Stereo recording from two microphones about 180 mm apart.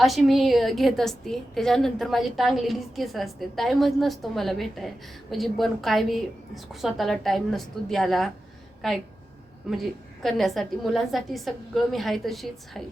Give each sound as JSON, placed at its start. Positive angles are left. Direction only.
{"t": 0.0, "sound": "a woman's voice", "side_deg": 0}